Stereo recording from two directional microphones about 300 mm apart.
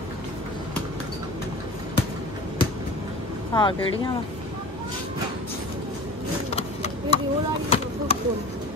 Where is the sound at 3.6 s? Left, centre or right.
Centre.